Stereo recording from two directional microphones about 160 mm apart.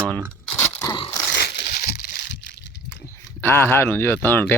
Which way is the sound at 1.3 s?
90° left.